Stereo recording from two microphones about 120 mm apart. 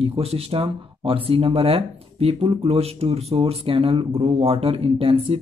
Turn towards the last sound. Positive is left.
turn(degrees=-55)  # may be behind; listen again after turning